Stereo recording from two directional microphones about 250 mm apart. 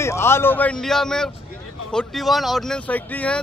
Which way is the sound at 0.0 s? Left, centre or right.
Centre.